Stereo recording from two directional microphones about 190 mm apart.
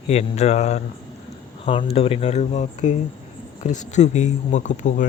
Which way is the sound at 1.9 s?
30° left (ahead or behind).